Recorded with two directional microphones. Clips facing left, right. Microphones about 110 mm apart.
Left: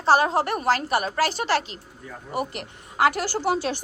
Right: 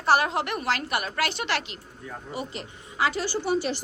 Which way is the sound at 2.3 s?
65° left (ahead or behind).